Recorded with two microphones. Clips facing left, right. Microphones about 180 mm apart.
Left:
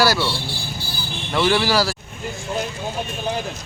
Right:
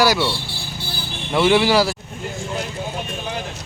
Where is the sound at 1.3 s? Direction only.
20° right (ahead or behind).